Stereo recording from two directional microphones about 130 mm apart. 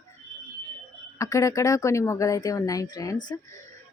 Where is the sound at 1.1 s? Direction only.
25° left (ahead or behind).